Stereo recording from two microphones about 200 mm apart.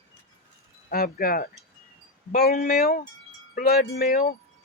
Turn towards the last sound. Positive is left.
turn(degrees=50)  # may be behind; listen again after turning